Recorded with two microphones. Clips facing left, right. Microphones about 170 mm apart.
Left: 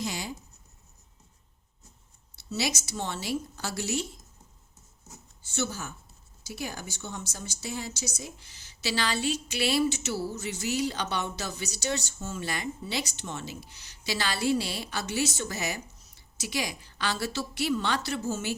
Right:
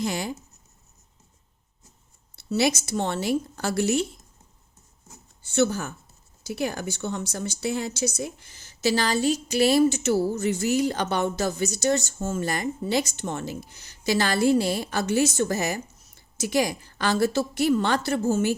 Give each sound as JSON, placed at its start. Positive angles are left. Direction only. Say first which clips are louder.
{"t": 0.0, "sound": "speech", "louder": "right 6 dB", "side_deg": -55}
{"t": 2.3, "sound": "speech", "louder": "right 8 dB", "side_deg": -60}
{"t": 5.4, "sound": "speech", "louder": "right 10 dB", "side_deg": -60}